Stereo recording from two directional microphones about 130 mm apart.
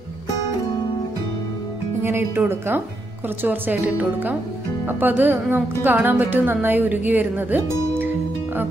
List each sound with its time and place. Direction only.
2.0 s a woman's voice: 20° right (ahead or behind)